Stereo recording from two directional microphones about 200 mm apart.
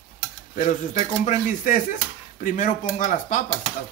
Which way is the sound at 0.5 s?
35° left (ahead or behind).